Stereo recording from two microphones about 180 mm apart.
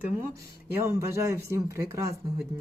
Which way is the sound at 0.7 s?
15° right (ahead or behind).